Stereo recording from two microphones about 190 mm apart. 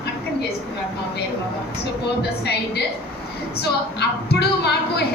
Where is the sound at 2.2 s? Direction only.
60° left (ahead or behind).